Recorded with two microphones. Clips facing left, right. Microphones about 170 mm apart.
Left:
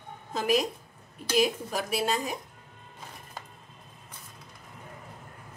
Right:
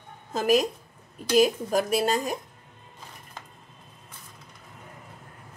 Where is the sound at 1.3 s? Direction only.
45° right (ahead or behind).